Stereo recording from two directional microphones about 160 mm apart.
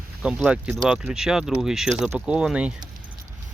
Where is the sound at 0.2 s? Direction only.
5° right (ahead or behind).